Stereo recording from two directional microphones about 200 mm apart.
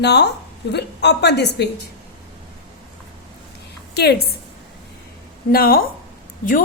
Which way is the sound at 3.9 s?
55° left (ahead or behind).